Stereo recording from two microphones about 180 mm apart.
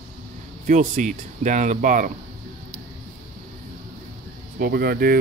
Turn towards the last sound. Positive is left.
turn(degrees=-55)  # may be behind; listen again after turning